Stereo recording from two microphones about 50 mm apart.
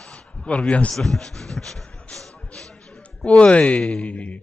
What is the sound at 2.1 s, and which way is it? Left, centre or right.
Music, centre.